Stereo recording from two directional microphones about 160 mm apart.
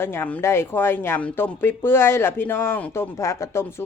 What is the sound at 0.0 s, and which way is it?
A woman's voice, 15° left (ahead or behind).